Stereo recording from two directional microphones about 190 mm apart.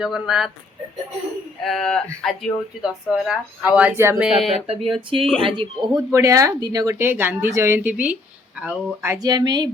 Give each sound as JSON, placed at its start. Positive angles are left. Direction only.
{"t": 0.0, "sound": "speech", "side_deg": 0}
{"t": 1.6, "sound": "speech", "side_deg": 0}
{"t": 4.5, "sound": "speech", "side_deg": -30}